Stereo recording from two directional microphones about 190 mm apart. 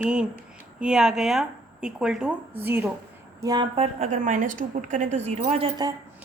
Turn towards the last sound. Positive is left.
turn(degrees=-25)  # may be behind; listen again after turning